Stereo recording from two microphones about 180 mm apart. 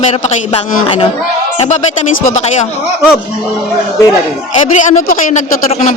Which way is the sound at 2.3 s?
40° left (ahead or behind).